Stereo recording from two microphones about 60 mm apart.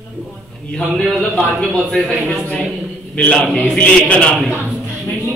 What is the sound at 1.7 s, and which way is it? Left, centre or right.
Speech, centre.